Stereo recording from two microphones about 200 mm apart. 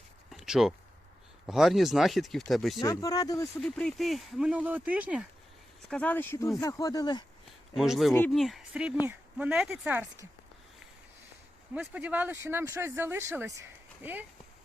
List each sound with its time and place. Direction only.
0.3 s a sound: centre (ahead or behind)
1.5 s speech: centre (ahead or behind)
2.8 s speech: 15° left (ahead or behind)
3.6 s speech: centre (ahead or behind)
5.9 s speech: 5° left (ahead or behind)
7.8 s speech: centre (ahead or behind)
11.7 s speech: 5° right (ahead or behind)